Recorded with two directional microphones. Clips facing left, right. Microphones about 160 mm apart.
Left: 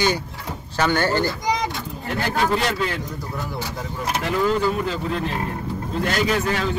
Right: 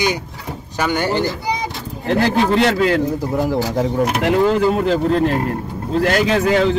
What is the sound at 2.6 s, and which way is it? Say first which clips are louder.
Speech: right 9 dB; 80° right.